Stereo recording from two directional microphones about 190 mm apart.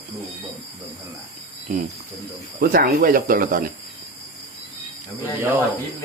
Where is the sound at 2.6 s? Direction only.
50° right (ahead or behind).